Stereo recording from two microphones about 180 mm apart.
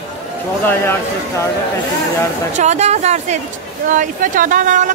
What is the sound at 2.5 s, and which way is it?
A woman's voice, 40° right (ahead or behind).